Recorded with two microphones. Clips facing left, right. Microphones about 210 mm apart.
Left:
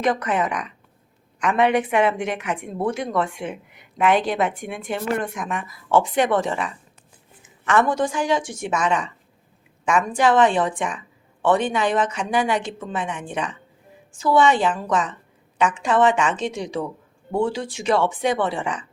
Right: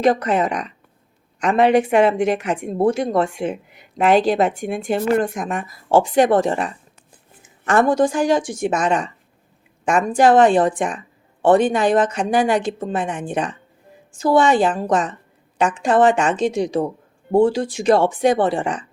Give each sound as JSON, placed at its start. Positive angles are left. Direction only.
{"t": 0.0, "sound": "speech", "side_deg": -30}